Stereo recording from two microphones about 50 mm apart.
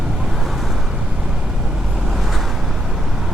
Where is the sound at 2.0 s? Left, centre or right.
Centre.